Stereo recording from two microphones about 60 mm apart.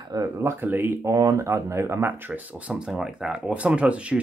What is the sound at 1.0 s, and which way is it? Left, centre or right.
Speech, right.